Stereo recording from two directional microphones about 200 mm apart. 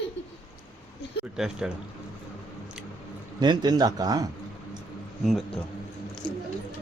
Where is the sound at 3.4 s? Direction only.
20° right (ahead or behind).